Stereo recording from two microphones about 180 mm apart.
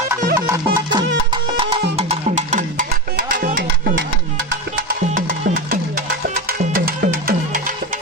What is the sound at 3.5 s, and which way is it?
Music, 65° right (ahead or behind).